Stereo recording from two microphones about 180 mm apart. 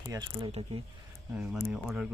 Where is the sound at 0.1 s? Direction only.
20° right (ahead or behind).